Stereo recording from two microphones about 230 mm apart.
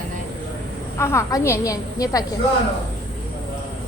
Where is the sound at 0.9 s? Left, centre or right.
Centre.